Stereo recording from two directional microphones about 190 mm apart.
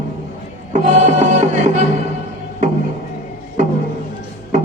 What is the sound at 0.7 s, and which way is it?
Music, 40° right (ahead or behind).